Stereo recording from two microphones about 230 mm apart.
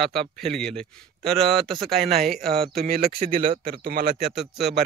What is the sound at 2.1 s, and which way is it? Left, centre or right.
Speech, right.